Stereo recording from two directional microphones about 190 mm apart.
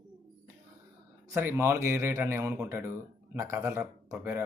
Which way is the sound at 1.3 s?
15° right (ahead or behind).